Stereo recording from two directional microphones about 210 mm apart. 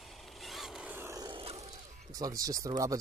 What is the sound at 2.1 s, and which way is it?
Speech, 15° right (ahead or behind).